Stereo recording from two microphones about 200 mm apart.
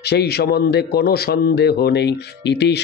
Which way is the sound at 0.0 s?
55° left (ahead or behind).